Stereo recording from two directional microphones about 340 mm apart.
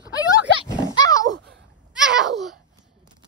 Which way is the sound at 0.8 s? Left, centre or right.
Centre.